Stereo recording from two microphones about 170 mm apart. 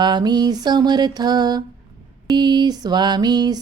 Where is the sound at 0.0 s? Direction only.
25° right (ahead or behind).